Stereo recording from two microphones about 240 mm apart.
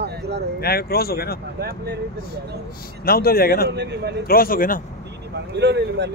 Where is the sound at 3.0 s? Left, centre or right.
Left.